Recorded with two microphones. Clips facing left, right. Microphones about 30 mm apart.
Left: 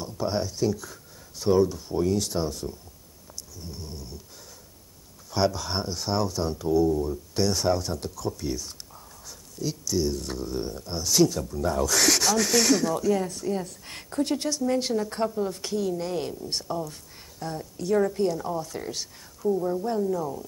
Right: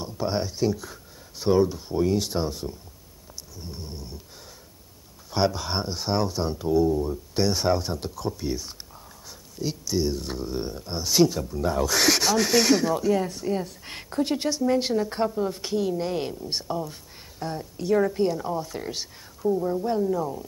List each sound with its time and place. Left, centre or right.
0.0 s speech: centre
3.5 s cat: centre
5.3 s speech: centre